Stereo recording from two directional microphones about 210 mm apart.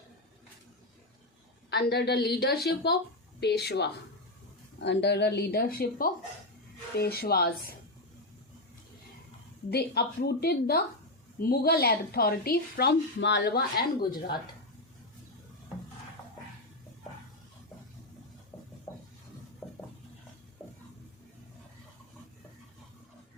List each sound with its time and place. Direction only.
1.7 s speech: 50° left (ahead or behind)
9.6 s speech: 50° left (ahead or behind)
18.5 s a sound: 10° left (ahead or behind)